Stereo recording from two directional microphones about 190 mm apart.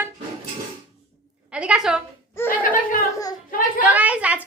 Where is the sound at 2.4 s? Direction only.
45° left (ahead or behind).